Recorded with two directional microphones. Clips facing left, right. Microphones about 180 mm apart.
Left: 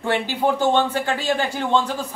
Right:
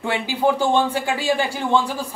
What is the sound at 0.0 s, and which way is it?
Speech, 15° right (ahead or behind).